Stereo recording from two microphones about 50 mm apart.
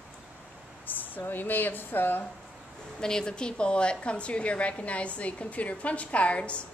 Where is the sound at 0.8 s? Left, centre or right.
Left.